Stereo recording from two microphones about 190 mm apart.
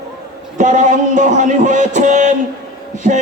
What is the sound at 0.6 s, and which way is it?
A man's voice, 40° right (ahead or behind).